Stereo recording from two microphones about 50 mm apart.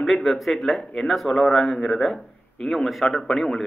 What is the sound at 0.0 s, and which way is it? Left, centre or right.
Speech, centre.